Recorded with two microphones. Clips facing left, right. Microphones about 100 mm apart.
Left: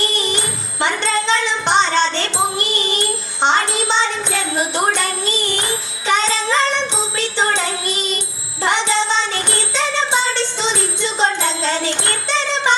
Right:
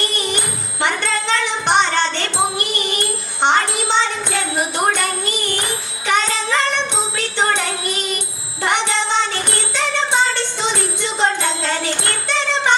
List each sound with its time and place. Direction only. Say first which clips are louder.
0.0 s music: left 1 dB; 20° left (ahead or behind)
2.6 s child singing: left 1 dB; 20° left (ahead or behind)
5.4 s music: left 1 dB; 20° left (ahead or behind)